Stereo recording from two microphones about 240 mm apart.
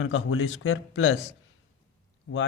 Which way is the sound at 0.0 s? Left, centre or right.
Left.